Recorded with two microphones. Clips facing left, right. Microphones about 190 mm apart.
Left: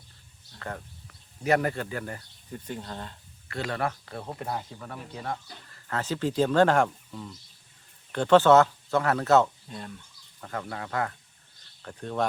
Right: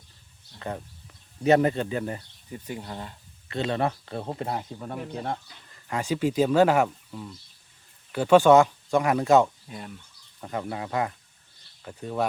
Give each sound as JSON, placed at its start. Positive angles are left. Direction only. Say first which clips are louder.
{"t": 0.6, "sound": "speech", "louder": "right 4 dB", "side_deg": -20}
{"t": 2.5, "sound": "speech", "louder": "right 1 dB", "side_deg": -10}
{"t": 3.5, "sound": "speech", "louder": "right 4 dB", "side_deg": -20}